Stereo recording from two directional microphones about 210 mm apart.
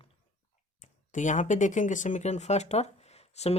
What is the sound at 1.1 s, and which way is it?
Speech, 35° left (ahead or behind).